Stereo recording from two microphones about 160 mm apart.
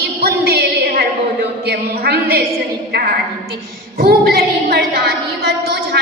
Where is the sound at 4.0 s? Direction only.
75° right (ahead or behind).